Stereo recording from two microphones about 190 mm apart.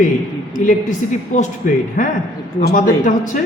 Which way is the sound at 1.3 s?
40° left (ahead or behind).